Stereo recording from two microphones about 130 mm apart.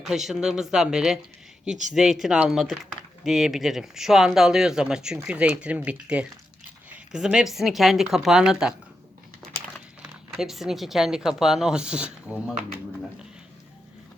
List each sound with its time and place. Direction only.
0.0 s speech: centre (ahead or behind)
9.5 s crumpling: 80° right
10.0 s speech: 5° right (ahead or behind)